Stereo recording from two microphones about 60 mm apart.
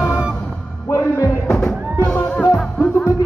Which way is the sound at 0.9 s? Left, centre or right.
Left.